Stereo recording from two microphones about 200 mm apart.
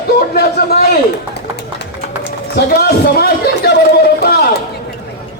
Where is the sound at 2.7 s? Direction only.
55° left (ahead or behind).